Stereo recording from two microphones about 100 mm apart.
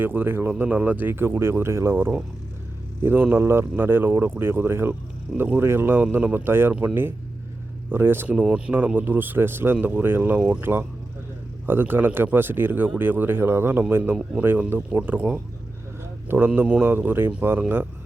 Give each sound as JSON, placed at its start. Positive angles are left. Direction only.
{"t": 0.0, "sound": "speech", "side_deg": -20}
{"t": 16.5, "sound": "speech", "side_deg": -10}